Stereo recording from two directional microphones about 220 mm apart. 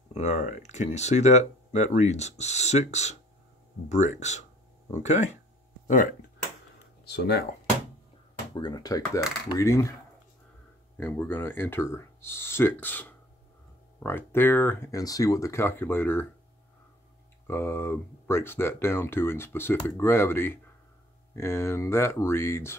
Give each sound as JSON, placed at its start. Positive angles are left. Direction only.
{"t": 0.1, "sound": "speech", "side_deg": 30}
{"t": 7.1, "sound": "speech", "side_deg": 50}
{"t": 8.5, "sound": "speech", "side_deg": 20}
{"t": 11.0, "sound": "speech", "side_deg": 10}
{"t": 17.5, "sound": "speech", "side_deg": 10}